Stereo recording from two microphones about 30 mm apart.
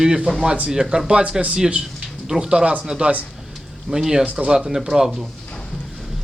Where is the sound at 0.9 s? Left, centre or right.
Right.